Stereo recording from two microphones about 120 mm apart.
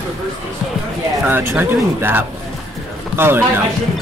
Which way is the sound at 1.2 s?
20° right (ahead or behind).